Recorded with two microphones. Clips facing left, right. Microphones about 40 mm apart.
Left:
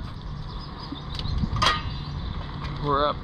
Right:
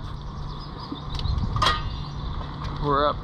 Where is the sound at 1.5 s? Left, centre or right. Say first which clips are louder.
Even; left.